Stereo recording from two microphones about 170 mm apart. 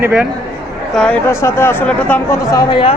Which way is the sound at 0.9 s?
5° left (ahead or behind).